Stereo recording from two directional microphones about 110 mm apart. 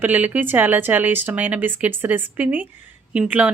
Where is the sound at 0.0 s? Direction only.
15° right (ahead or behind).